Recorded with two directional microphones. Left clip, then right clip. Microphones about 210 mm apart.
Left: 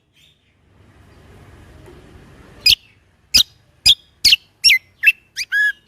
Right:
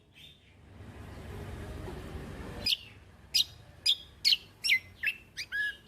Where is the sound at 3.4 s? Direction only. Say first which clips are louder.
Left 14 dB; 45° left (ahead or behind).